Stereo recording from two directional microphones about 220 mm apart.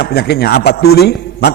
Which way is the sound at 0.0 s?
45° left (ahead or behind).